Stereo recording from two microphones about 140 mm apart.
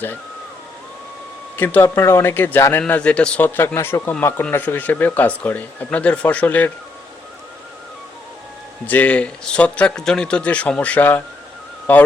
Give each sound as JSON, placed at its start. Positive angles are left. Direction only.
{"t": 1.5, "sound": "speech", "side_deg": 15}
{"t": 8.9, "sound": "speech", "side_deg": 10}